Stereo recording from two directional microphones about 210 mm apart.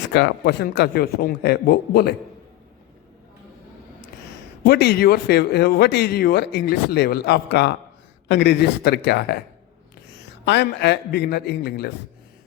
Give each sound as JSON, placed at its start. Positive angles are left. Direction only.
{"t": 0.1, "sound": "speech", "side_deg": 55}
{"t": 4.6, "sound": "speech", "side_deg": 50}
{"t": 10.4, "sound": "speech", "side_deg": 55}